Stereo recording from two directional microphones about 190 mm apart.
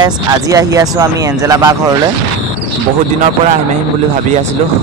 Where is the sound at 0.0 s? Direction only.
20° right (ahead or behind).